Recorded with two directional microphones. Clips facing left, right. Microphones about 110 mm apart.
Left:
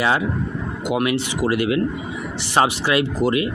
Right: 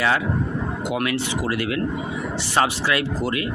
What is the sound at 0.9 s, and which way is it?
Speech, 15° left (ahead or behind).